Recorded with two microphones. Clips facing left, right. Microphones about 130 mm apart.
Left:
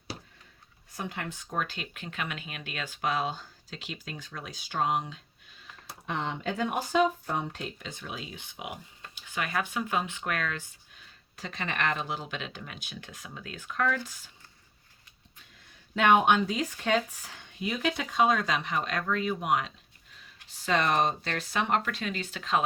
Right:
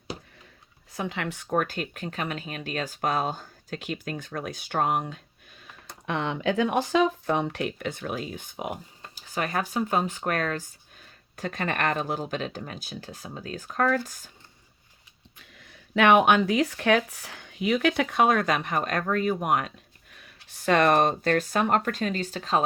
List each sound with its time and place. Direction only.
0.9 s speech: 90° right; by 5.2 s 50° right (ahead or behind)
6.1 s speech: 70° right (ahead or behind); by 14.3 s 45° right (ahead or behind)
15.5 s speech: 80° right; by 22.6 s 35° right (ahead or behind)